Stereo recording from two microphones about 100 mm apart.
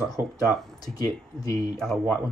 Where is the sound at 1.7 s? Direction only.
5° left (ahead or behind).